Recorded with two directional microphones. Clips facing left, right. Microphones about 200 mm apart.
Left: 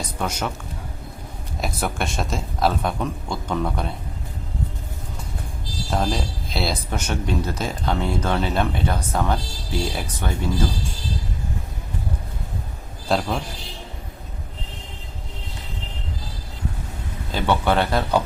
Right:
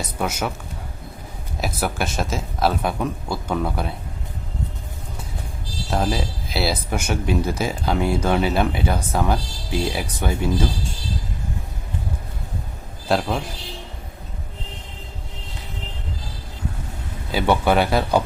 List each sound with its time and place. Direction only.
0.2 s speech: 5° right (ahead or behind)
1.5 s speech: centre (ahead or behind)
5.9 s speech: 5° right (ahead or behind)
13.1 s speech: centre (ahead or behind)
17.3 s speech: 10° right (ahead or behind)